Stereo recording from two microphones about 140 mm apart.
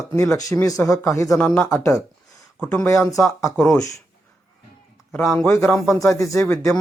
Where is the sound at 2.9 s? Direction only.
20° left (ahead or behind).